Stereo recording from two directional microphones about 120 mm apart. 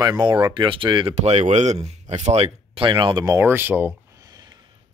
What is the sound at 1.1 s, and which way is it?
Speech, 70° right (ahead or behind).